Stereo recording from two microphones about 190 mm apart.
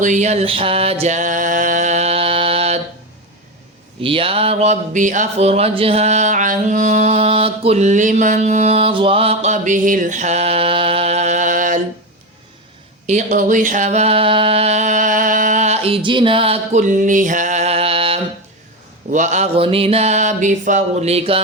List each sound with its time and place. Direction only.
0.0 s music: 40° right (ahead or behind)
4.0 s speech: 30° right (ahead or behind); by 11.8 s 45° right (ahead or behind)
13.1 s a sound: 40° right (ahead or behind)
19.1 s speech: 40° right (ahead or behind)